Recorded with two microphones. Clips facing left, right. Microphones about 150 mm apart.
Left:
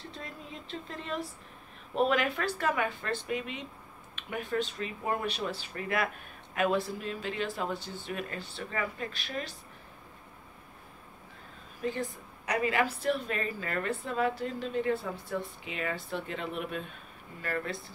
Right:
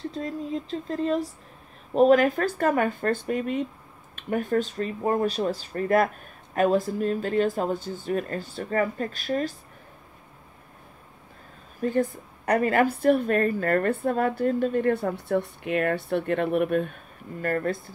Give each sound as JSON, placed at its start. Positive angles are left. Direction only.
{"t": 0.1, "sound": "speech", "side_deg": -40}
{"t": 11.8, "sound": "speech", "side_deg": -50}